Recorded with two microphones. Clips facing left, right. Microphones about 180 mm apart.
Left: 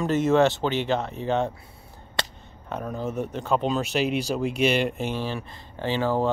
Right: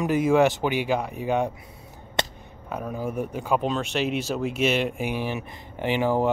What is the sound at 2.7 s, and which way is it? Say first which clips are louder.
Speech: even; 10° right (ahead or behind).